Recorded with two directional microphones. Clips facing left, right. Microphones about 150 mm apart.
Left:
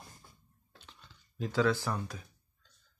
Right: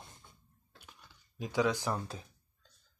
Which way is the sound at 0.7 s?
10° right (ahead or behind).